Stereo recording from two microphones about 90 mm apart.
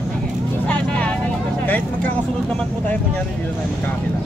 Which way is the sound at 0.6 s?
15° left (ahead or behind).